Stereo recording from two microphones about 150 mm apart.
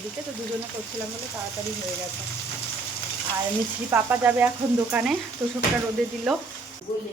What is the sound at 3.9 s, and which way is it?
A woman's voice, 15° right (ahead or behind).